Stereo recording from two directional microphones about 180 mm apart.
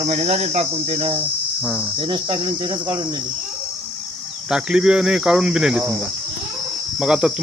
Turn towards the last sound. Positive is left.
turn(degrees=0)  # may be behind; listen again after turning